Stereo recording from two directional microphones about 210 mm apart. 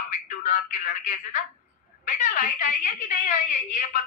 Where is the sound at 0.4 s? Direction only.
35° left (ahead or behind).